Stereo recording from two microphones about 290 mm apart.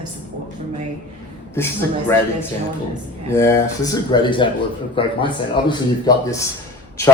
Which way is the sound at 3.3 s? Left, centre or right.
Centre.